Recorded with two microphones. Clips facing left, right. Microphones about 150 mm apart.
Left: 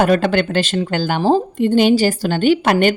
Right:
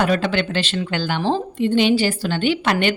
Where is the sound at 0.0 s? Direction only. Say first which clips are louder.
Left 5 dB; 50° left (ahead or behind).